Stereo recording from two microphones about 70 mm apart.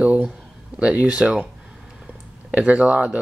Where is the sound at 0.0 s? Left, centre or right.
Right.